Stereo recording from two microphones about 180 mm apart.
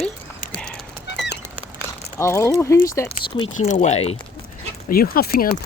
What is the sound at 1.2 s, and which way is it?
Bird, 70° left (ahead or behind).